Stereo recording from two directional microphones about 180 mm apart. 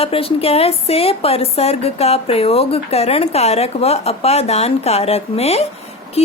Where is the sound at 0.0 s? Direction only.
30° left (ahead or behind).